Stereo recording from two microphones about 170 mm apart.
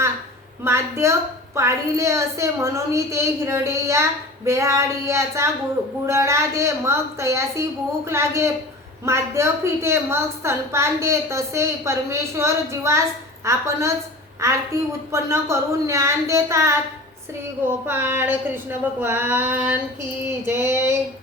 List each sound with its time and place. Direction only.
0.6 s a woman's voice: 15° right (ahead or behind)